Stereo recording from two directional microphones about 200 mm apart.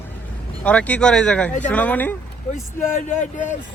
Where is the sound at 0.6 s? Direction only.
5° left (ahead or behind).